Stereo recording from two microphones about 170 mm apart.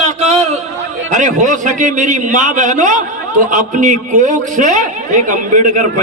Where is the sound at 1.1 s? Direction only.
45° right (ahead or behind).